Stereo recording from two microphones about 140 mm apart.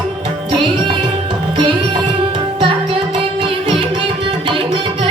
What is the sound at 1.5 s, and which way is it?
Music, 35° right (ahead or behind).